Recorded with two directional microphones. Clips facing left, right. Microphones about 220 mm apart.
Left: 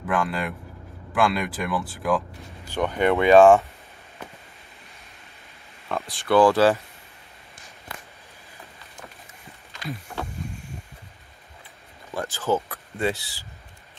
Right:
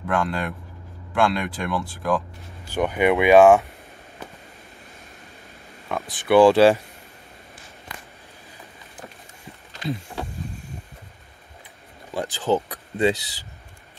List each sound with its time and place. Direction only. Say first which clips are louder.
0.0 s speech: right 1 dB; 5° left (ahead or behind)
2.7 s speech: right 2 dB; 10° right (ahead or behind)
5.9 s speech: right 1 dB; centre (ahead or behind)
6.3 s speech: right 3 dB; 25° right (ahead or behind)
12.1 s speech: right 2 dB; 15° right (ahead or behind)